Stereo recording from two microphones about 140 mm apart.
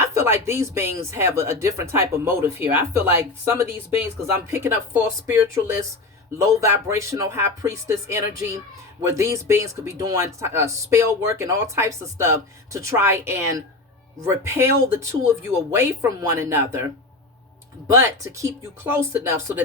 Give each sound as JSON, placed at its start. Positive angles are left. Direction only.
{"t": 0.1, "sound": "speech", "side_deg": -20}
{"t": 17.9, "sound": "speech", "side_deg": -20}